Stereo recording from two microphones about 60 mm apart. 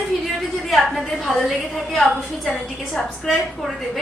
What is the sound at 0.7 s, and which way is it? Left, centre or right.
A woman's voice, centre.